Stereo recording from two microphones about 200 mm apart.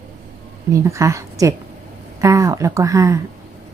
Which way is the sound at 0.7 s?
15° right (ahead or behind).